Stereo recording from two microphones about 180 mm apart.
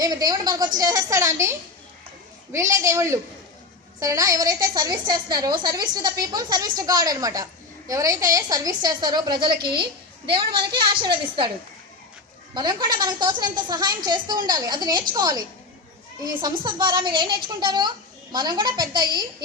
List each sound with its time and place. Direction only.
0.0 s a woman's voice: 20° right (ahead or behind)
12.5 s a woman's voice: 20° right (ahead or behind)